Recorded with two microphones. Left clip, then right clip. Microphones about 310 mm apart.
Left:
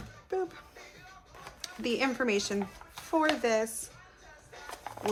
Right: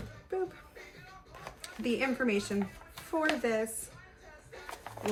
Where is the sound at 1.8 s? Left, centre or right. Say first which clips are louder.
Left 2 dB; centre.